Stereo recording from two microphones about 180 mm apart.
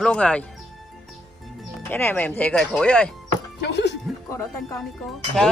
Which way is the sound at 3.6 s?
70° left (ahead or behind).